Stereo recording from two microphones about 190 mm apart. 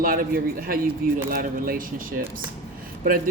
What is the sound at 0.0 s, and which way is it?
Speech, 50° right (ahead or behind).